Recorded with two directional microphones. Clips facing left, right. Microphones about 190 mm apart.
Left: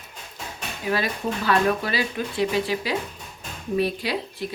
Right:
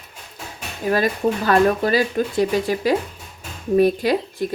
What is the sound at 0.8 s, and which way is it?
Speech, 45° right (ahead or behind).